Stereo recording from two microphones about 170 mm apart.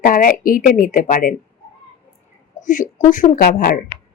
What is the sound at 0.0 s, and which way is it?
Speech, 55° left (ahead or behind).